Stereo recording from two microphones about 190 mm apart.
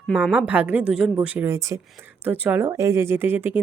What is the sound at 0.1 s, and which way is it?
A woman's voice, 5° right (ahead or behind).